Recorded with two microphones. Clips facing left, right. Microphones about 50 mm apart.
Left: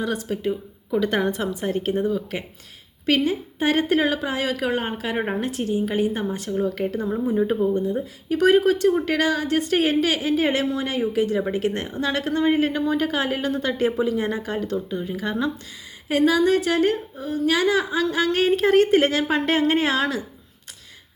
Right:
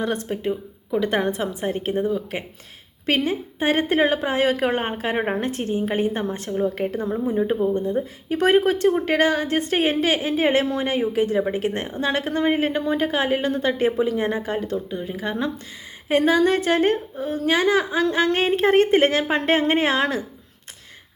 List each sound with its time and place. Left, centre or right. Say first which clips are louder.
0.0 s a woman's voice: right 1 dB; right
6.6 s a woman's voice: right 1 dB; right
7.3 s speech: even; centre
7.9 s a woman's voice: even; right
16.0 s speech: right 1 dB; right